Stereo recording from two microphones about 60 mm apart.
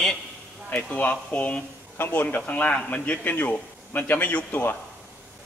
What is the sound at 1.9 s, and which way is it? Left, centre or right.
A man's voice, left.